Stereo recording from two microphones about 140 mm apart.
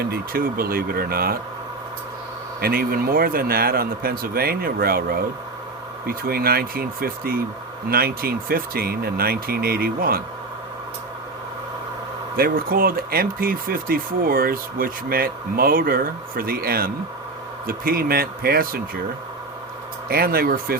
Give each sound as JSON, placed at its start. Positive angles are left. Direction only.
{"t": 0.1, "sound": "speech", "side_deg": -90}
{"t": 2.6, "sound": "speech", "side_deg": -90}
{"t": 12.4, "sound": "speech", "side_deg": -90}
{"t": 20.1, "sound": "speech", "side_deg": -90}